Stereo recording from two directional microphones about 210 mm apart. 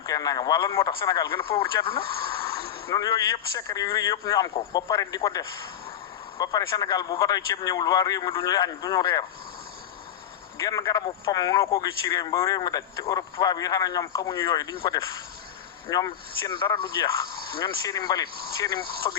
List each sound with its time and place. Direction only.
0.0 s a man's voice: 20° left (ahead or behind)
10.6 s a man's voice: 15° left (ahead or behind)